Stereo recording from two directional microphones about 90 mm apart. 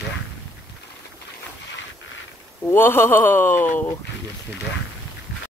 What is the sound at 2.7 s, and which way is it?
Speech, 25° left (ahead or behind).